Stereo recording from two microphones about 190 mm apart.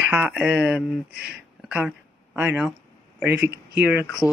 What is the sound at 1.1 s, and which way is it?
Speech, 55° right (ahead or behind).